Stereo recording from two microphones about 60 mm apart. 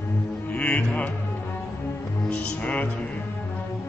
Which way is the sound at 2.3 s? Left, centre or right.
Left.